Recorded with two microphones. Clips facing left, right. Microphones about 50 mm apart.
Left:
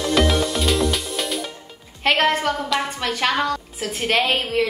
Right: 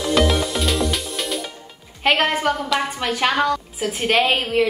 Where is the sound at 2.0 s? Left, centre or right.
Centre.